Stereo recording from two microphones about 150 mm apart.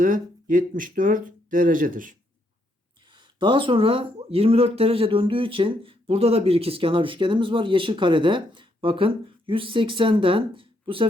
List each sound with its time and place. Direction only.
0.0 s speech: 60° right (ahead or behind)
3.1 s speech: 30° right (ahead or behind)